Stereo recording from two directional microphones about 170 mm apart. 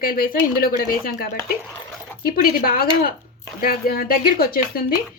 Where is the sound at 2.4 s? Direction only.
55° left (ahead or behind).